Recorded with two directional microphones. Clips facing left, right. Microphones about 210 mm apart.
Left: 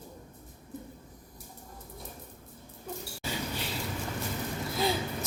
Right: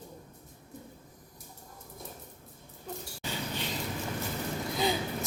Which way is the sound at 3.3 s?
10° left (ahead or behind).